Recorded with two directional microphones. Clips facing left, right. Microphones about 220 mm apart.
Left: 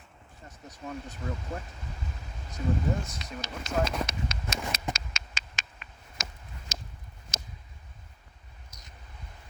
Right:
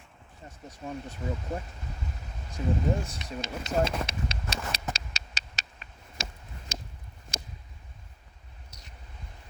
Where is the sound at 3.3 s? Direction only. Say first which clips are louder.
Right 3 dB; 25° right (ahead or behind).